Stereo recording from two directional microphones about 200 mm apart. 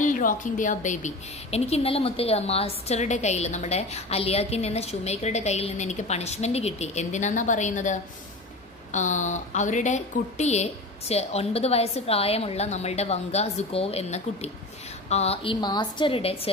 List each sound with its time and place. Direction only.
0.0 s a woman's voice: 40° left (ahead or behind)